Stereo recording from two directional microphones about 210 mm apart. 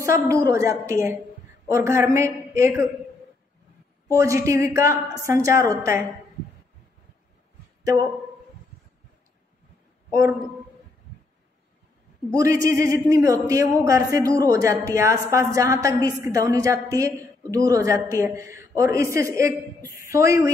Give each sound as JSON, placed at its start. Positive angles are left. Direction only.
{"t": 0.0, "sound": "a woman's voice", "side_deg": -15}
{"t": 4.1, "sound": "a woman's voice", "side_deg": -15}
{"t": 7.8, "sound": "speech", "side_deg": -15}
{"t": 12.3, "sound": "a woman's voice", "side_deg": -15}